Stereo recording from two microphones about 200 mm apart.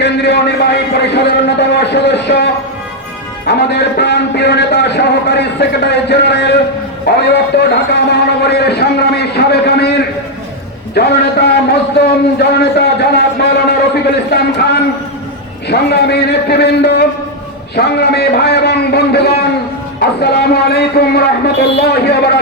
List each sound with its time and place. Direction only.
0.0 s a man's voice: 55° left (ahead or behind)
1.1 s a sound: 55° left (ahead or behind)
3.4 s a man's voice: 55° left (ahead or behind)